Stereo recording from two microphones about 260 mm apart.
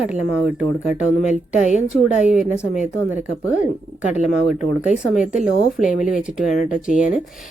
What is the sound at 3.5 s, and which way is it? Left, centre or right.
Speech, left.